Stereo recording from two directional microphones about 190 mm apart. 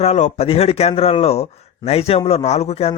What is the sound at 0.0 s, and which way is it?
A man's voice, 35° left (ahead or behind).